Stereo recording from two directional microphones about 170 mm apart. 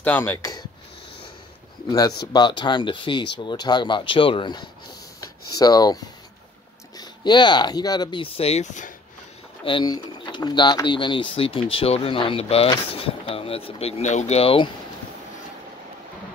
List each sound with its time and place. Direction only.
0.0 s speech: 10° left (ahead or behind)
1.9 s speech: 20° left (ahead or behind); by 8.9 s 45° left (ahead or behind)
9.7 s speech: 25° left (ahead or behind)